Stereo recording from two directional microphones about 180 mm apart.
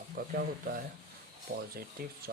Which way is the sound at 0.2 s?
55° right (ahead or behind).